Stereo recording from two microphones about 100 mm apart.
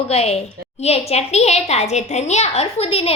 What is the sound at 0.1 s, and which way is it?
A woman's voice, 90° left.